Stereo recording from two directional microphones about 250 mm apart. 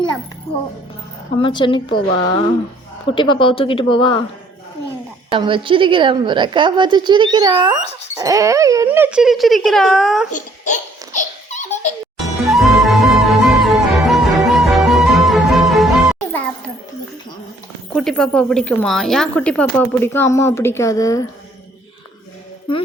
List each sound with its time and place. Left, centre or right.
1.4 s speech: centre
5.3 s a woman's voice: centre
10.3 s baby laughter: left
12.2 s music: centre
17.9 s speech: centre